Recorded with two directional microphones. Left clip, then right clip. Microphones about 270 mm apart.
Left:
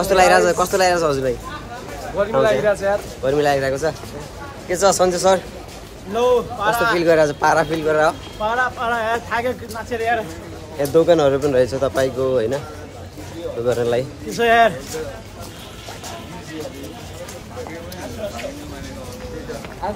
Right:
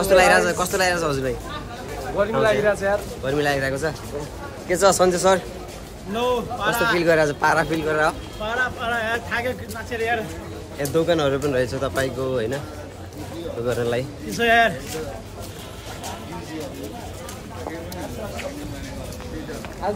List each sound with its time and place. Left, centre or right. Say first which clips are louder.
0.0 s speech: left 2 dB; centre
2.2 s speech: left 3 dB; centre
4.6 s speech: left 1 dB; centre
6.3 s speech: left 5 dB; centre
8.4 s speech: left 4 dB; centre
10.8 s speech: left 6 dB; centre
13.7 s speech: left 5 dB; centre
14.3 s speech: left 3 dB; centre